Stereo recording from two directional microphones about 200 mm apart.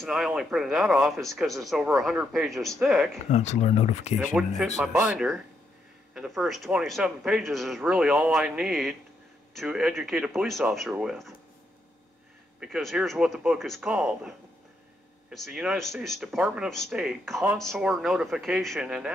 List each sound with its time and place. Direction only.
0.0 s speech: centre (ahead or behind)
3.3 s speech: 35° left (ahead or behind)
4.4 s speech: centre (ahead or behind)
12.5 s speech: 5° right (ahead or behind)